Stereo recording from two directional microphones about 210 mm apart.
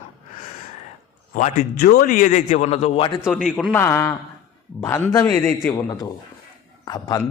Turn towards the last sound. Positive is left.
turn(degrees=20)  # may be behind; listen again after turning